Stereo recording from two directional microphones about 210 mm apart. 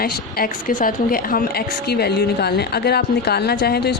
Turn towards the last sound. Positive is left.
turn(degrees=50)  # may be behind; listen again after turning